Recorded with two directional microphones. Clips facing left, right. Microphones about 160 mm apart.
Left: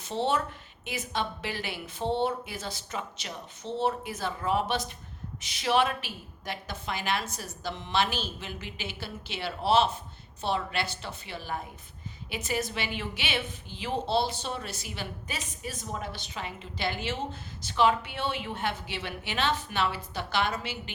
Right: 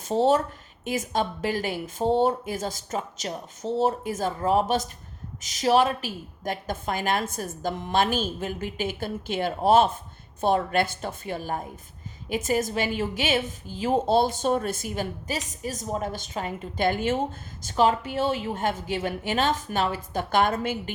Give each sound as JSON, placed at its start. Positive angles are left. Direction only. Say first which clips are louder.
{"t": 0.0, "sound": "a woman's voice", "louder": "right 7 dB", "side_deg": -40}